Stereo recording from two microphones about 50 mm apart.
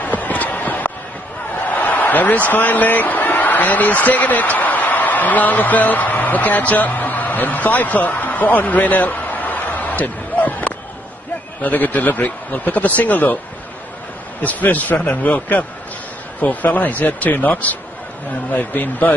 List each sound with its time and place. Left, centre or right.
0.0 s a sound: left
1.6 s speech: left
14.4 s speech: left